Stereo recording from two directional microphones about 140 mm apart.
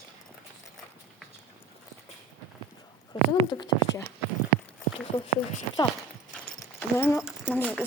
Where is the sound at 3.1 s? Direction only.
30° left (ahead or behind).